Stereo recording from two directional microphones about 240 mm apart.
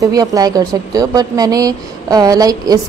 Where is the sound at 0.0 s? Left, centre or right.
Centre.